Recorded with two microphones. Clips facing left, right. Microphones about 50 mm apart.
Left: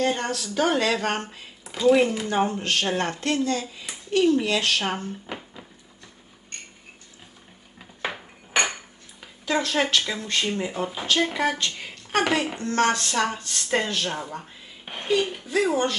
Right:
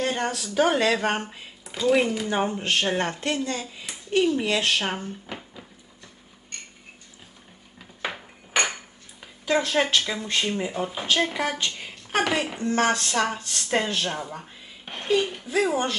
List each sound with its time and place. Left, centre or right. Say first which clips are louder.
0.0 s a woman's voice: left 1 dB; centre
1.6 s a woman's voice: left 3 dB; centre
4.8 s speech: left 1 dB; centre
7.8 s dishes: left 1 dB; centre
9.2 s speech: right 1 dB; centre
14.8 s a sound: even; centre
15.1 s a woman's voice: even; centre